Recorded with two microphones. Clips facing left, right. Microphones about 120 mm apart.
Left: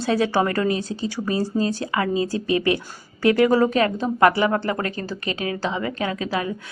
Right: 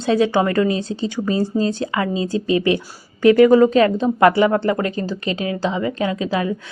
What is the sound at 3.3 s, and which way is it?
Speech, 25° left (ahead or behind).